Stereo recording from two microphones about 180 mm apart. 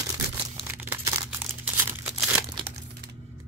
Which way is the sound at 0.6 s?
10° right (ahead or behind).